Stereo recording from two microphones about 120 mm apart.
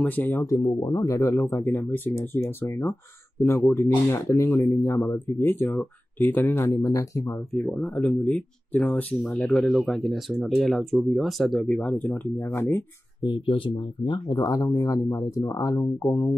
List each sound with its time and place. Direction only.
0.0 s speech: 15° left (ahead or behind)
0.5 s speech: 30° left (ahead or behind)
7.5 s speech: 10° left (ahead or behind)
13.2 s speech: 45° left (ahead or behind)